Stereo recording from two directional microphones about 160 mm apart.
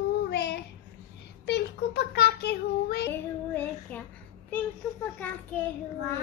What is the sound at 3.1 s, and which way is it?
Child singing, 10° left (ahead or behind).